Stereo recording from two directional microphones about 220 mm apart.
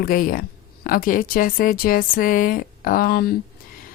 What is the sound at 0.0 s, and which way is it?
Speech, 40° left (ahead or behind).